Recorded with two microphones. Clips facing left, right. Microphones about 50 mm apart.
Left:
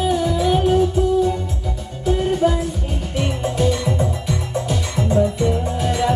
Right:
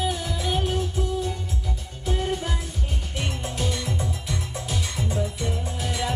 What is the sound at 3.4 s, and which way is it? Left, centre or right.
Music, left.